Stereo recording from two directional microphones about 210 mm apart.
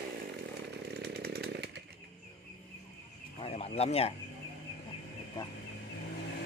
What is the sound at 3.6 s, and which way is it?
Speech, 30° left (ahead or behind).